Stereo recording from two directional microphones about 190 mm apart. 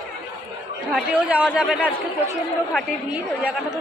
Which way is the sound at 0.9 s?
5° right (ahead or behind).